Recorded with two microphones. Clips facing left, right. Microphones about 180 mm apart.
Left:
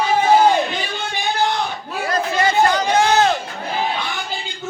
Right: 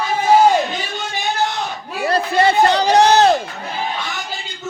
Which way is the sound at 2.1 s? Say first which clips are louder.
Right 4 dB; 30° right (ahead or behind).